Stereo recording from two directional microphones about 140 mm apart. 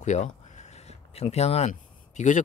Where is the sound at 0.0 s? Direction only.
60° left (ahead or behind).